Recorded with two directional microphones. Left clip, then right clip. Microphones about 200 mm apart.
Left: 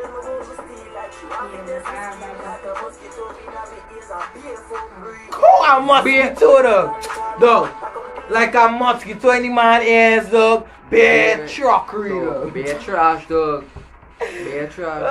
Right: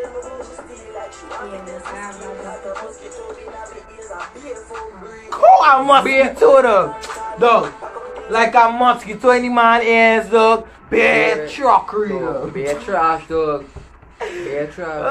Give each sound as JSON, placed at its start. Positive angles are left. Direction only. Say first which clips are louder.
{"t": 5.3, "sound": "speech", "louder": "right 1 dB", "side_deg": -5}
{"t": 12.5, "sound": "speech", "louder": "right 1 dB", "side_deg": 15}
{"t": 14.2, "sound": "a sound", "louder": "left 1 dB", "side_deg": -10}
{"t": 14.6, "sound": "speech", "louder": "left 2 dB", "side_deg": 15}